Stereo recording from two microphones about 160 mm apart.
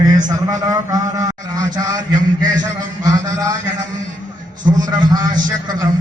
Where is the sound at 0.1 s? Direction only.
25° right (ahead or behind).